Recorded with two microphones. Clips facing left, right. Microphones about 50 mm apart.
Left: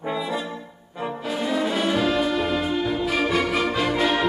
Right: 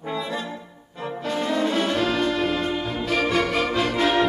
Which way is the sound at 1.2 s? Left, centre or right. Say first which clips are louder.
Right 1 dB; centre.